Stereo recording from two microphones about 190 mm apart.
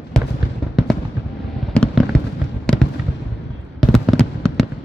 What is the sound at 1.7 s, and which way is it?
Fireworks, 5° left (ahead or behind).